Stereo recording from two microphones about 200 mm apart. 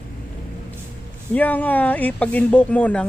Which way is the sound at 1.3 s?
10° left (ahead or behind).